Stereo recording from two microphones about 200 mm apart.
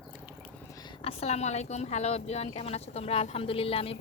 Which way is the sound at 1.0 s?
30° left (ahead or behind).